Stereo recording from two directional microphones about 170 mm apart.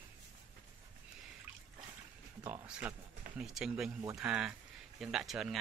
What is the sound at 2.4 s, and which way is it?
Speech, 5° right (ahead or behind).